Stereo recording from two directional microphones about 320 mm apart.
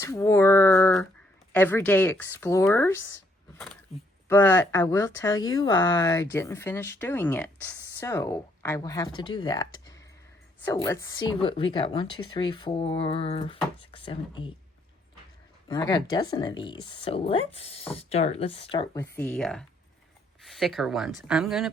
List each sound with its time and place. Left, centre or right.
0.0 s a sound: centre
1.5 s speech: centre
4.3 s speech: centre
15.7 s speech: centre